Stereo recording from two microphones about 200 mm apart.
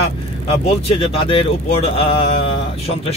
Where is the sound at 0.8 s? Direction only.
30° left (ahead or behind).